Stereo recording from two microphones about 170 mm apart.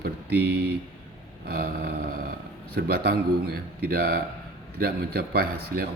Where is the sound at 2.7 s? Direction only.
65° right (ahead or behind).